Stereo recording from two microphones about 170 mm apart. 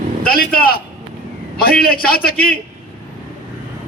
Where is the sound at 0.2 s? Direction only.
60° left (ahead or behind).